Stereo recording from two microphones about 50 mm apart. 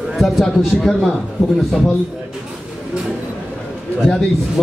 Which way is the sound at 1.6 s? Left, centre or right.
Centre.